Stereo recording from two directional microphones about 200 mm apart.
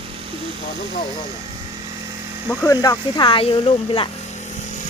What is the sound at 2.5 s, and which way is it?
Speech, 10° left (ahead or behind).